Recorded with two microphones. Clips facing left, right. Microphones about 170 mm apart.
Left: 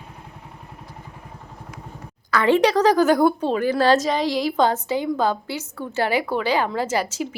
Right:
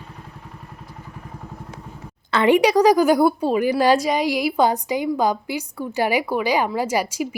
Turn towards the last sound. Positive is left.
turn(degrees=-10)  # may be behind; listen again after turning